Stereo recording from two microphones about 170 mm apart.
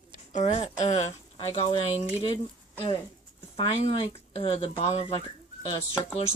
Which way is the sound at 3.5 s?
30° left (ahead or behind).